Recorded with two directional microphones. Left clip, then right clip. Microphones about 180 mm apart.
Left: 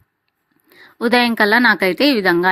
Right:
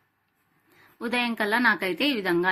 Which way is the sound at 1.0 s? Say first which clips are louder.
Left 12 dB; 55° left (ahead or behind).